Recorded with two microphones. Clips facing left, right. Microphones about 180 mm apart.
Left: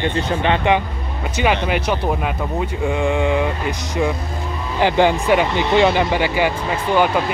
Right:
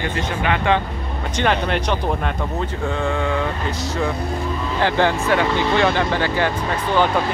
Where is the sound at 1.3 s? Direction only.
10° left (ahead or behind).